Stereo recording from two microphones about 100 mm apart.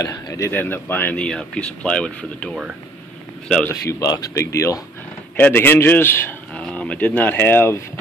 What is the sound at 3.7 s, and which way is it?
A man's voice, 30° left (ahead or behind).